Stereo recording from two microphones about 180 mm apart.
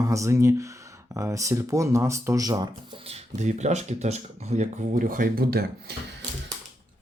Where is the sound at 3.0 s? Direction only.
40° right (ahead or behind); by 5.9 s 55° right (ahead or behind).